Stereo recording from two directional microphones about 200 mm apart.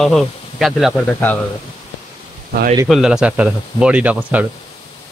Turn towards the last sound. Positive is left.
turn(degrees=-5)  # may be behind; listen again after turning